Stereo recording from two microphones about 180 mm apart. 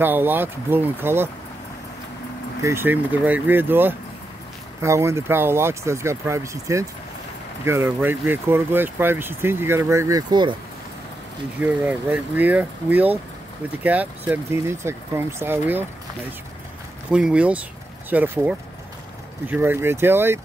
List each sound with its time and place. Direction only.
0.0 s speech: 10° right (ahead or behind)
2.6 s speech: 15° right (ahead or behind)
11.6 s speech: 10° right (ahead or behind)
17.1 s speech: 5° right (ahead or behind)